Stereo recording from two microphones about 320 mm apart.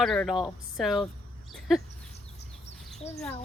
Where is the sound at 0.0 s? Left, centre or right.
Centre.